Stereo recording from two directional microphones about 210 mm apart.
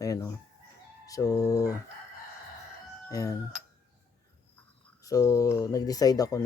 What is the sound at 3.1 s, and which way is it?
Speech, 15° left (ahead or behind).